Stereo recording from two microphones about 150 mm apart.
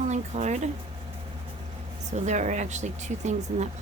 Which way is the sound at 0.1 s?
50° right (ahead or behind).